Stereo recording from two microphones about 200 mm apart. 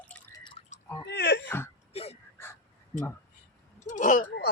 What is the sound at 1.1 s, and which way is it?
Wail, 55° left (ahead or behind).